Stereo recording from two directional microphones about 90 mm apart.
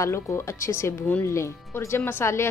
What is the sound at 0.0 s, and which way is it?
A woman's voice, 35° left (ahead or behind).